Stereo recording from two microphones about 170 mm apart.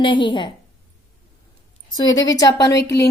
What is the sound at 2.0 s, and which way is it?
Speech, 20° left (ahead or behind).